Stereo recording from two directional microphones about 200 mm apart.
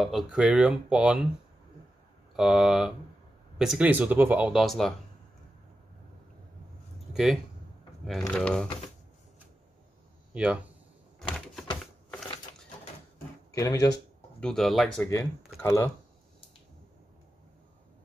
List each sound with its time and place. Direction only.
0.0 s speech: centre (ahead or behind)
2.3 s speech: centre (ahead or behind)
8.3 s speech: 5° left (ahead or behind)
10.3 s speech: 5° right (ahead or behind)
11.3 s typewriter: centre (ahead or behind)
11.8 s a sound: centre (ahead or behind)
13.6 s speech: 20° left (ahead or behind)
14.4 s speech: centre (ahead or behind)
15.0 s speech: 15° left (ahead or behind)